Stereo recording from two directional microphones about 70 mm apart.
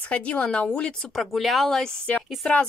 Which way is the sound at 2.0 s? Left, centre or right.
Centre.